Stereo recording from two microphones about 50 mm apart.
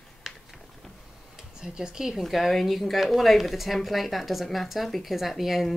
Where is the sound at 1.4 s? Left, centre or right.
Centre.